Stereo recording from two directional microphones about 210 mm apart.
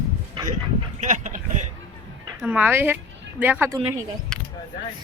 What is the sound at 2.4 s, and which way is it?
A woman's voice, 5° right (ahead or behind).